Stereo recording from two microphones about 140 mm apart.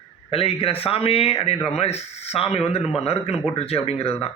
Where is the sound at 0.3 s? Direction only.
40° left (ahead or behind).